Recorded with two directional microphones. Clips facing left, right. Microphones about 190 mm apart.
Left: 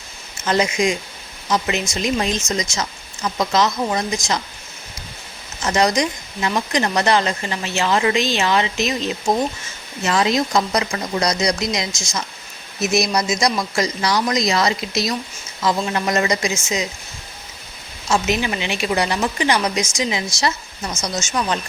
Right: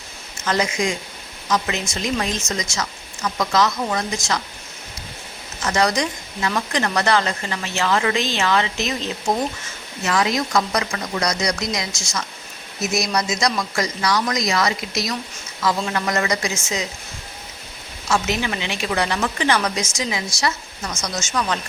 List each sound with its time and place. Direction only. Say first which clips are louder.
0.4 s speech: left 3 dB; 20° left (ahead or behind)
5.6 s speech: left 2 dB; 20° left (ahead or behind)
10.0 s speech: left 2 dB; 25° left (ahead or behind)
18.1 s speech: left 2 dB; 20° left (ahead or behind)